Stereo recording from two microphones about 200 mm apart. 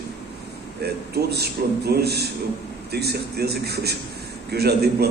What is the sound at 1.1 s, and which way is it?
A man's voice, 55° right (ahead or behind).